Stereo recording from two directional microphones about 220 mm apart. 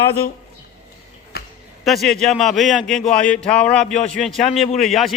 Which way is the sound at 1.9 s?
Centre (ahead or behind).